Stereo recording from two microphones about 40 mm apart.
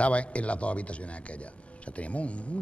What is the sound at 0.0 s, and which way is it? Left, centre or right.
Speech, left.